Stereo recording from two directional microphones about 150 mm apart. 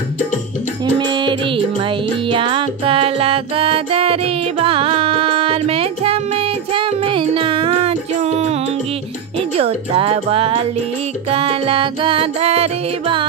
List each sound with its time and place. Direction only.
0.9 s music: 30° right (ahead or behind)
9.6 s music: 40° right (ahead or behind)